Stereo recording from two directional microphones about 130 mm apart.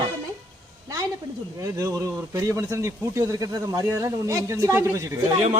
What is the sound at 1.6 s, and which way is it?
Speech, 25° right (ahead or behind).